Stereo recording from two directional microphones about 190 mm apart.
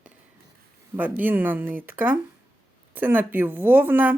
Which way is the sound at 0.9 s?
10° right (ahead or behind).